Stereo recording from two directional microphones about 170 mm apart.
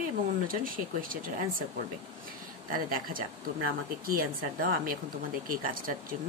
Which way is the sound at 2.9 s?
55° right (ahead or behind).